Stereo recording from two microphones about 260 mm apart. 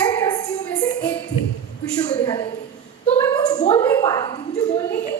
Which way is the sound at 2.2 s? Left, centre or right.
Centre.